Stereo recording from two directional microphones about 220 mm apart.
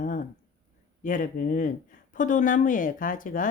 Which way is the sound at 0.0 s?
40° left (ahead or behind).